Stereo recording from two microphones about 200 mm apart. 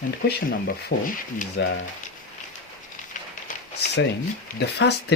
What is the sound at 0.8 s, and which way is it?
Speech, 50° left (ahead or behind).